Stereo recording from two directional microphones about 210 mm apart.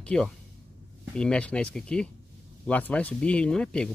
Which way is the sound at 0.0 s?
5° left (ahead or behind).